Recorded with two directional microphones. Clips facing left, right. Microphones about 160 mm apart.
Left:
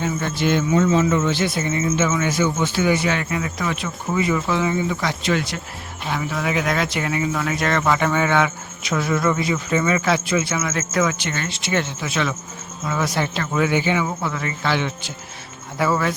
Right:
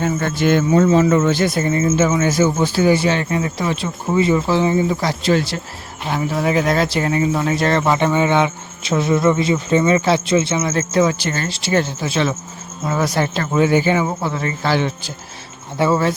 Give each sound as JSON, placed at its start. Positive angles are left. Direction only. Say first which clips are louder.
{"t": 0.0, "sound": "speech", "louder": "right 4 dB", "side_deg": -50}